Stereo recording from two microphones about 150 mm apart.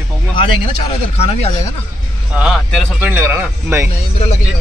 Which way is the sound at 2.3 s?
5° right (ahead or behind).